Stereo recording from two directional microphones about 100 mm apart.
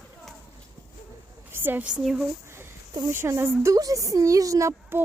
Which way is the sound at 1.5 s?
20° right (ahead or behind).